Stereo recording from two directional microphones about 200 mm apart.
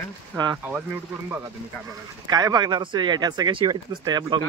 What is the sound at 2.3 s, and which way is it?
Speech, 20° right (ahead or behind).